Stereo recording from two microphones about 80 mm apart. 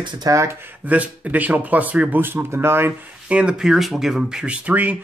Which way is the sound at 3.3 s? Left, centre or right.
Centre.